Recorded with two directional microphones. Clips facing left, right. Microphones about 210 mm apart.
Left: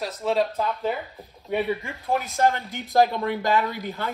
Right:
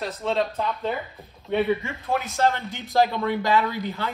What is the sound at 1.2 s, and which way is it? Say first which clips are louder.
Speech: right 2 dB; 15° left (ahead or behind).